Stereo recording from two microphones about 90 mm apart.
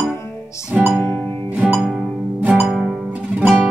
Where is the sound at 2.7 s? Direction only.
5° right (ahead or behind).